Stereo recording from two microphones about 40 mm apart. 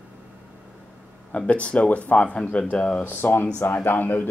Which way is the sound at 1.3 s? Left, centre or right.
Left.